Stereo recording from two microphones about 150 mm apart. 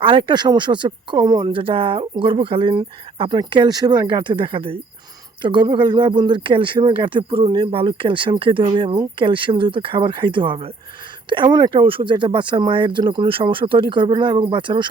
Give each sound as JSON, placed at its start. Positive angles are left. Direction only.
{"t": 0.0, "sound": "speech", "side_deg": -35}